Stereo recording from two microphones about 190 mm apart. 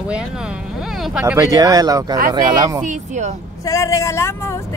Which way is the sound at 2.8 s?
40° right (ahead or behind).